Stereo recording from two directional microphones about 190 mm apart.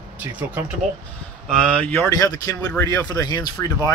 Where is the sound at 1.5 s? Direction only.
5° left (ahead or behind); by 3.7 s 20° left (ahead or behind).